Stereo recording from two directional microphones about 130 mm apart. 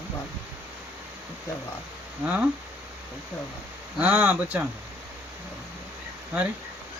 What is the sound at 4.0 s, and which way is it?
Speech, 10° right (ahead or behind).